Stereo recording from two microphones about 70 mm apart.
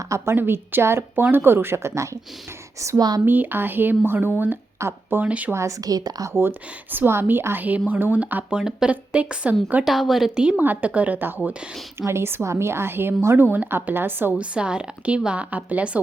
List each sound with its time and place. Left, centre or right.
0.0 s a woman's voice: right
0.3 s a woman's voice: right
3.2 s a woman's voice: right
5.2 s a woman's voice: right
5.5 s a woman's voice: right
6.3 s a woman's voice: right
9.8 s a woman's voice: centre
10.6 s a woman's voice: right
11.9 s a woman's voice: right
14.3 s speech: centre